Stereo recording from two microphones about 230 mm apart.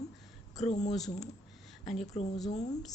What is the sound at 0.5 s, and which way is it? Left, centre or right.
Speech, left.